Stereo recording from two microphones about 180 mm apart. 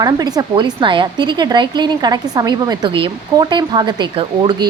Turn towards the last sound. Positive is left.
turn(degrees=-25)  # may be behind; listen again after turning